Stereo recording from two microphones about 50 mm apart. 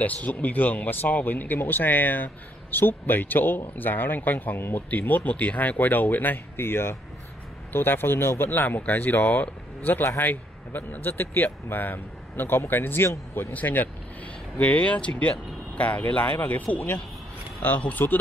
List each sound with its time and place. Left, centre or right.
0.0 s speech: left
4.9 s speech: left